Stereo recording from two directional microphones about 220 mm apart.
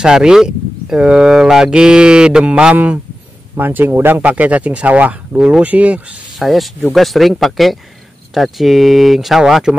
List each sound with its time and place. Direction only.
0.0 s speech: 5° right (ahead or behind)